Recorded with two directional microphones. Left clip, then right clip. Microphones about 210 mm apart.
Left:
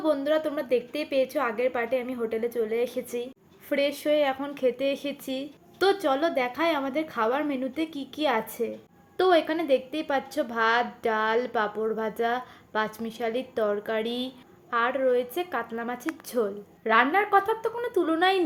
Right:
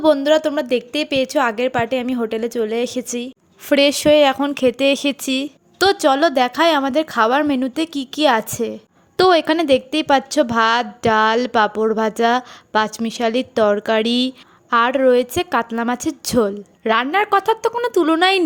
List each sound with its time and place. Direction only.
0.0 s a woman's voice: 50° right (ahead or behind)